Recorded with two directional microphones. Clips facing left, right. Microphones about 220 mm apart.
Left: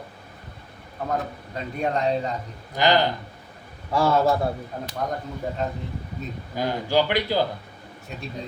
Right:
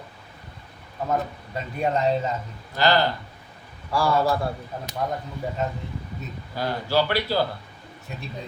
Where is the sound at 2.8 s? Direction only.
15° left (ahead or behind).